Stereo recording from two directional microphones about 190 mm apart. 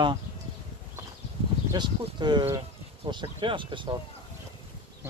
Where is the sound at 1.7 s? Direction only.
25° right (ahead or behind).